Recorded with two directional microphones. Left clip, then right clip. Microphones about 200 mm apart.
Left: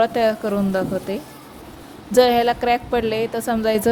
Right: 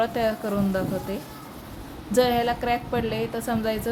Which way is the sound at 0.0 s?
35° left (ahead or behind).